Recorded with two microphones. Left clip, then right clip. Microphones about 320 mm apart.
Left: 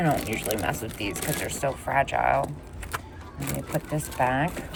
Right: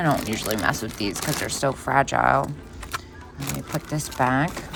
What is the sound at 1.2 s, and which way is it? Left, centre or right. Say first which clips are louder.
Speech: right 4 dB; right.